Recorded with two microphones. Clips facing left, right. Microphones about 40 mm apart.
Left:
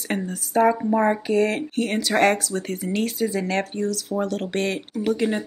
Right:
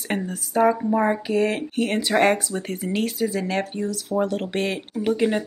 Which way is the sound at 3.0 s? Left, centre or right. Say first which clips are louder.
Even; centre.